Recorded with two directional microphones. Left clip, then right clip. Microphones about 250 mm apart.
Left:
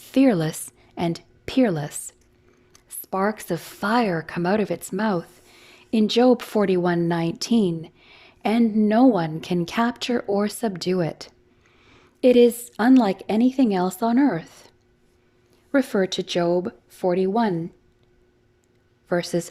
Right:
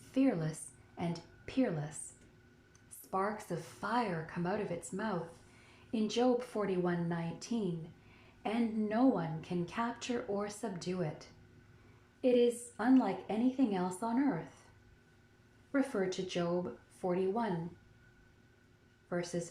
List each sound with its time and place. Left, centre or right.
0.1 s a woman's voice: left
15.7 s a woman's voice: left
19.0 s speech: left